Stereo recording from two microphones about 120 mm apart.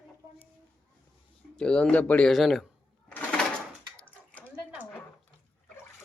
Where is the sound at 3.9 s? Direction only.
10° left (ahead or behind).